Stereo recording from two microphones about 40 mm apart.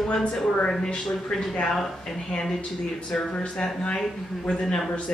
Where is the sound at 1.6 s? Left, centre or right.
Centre.